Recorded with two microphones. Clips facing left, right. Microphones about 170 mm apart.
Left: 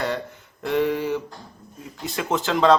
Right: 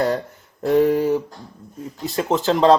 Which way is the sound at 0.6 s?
40° right (ahead or behind).